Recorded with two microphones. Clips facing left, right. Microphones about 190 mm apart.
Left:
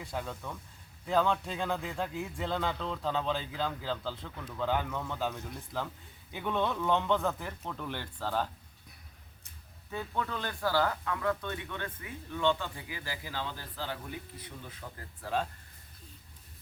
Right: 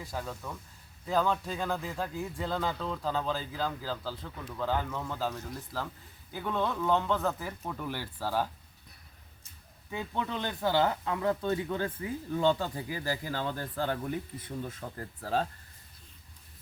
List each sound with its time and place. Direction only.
0.0 s speech: centre (ahead or behind)
9.9 s speech: 20° right (ahead or behind); by 15.4 s 40° right (ahead or behind)